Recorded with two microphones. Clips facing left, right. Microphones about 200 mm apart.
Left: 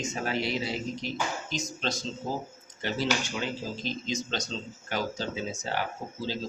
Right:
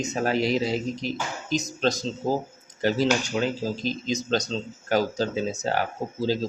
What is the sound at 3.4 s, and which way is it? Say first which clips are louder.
Speech: right 7 dB; 40° right (ahead or behind).